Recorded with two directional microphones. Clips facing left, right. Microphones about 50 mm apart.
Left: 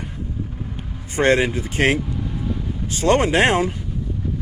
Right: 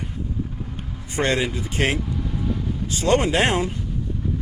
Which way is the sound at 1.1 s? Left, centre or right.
Left.